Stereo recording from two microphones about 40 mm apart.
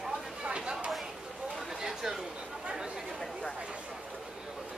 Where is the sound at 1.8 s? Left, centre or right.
Centre.